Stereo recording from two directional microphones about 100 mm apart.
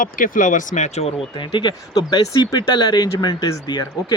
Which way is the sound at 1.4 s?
55° left (ahead or behind).